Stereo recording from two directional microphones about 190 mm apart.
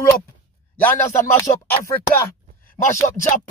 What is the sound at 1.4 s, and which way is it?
Speech, 15° left (ahead or behind).